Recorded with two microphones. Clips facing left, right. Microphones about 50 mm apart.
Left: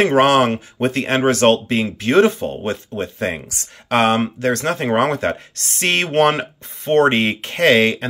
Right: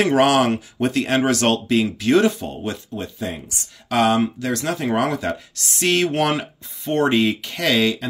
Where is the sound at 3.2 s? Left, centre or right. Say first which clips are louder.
Left 5 dB; left.